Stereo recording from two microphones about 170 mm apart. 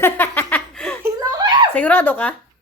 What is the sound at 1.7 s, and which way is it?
Speech, 10° left (ahead or behind).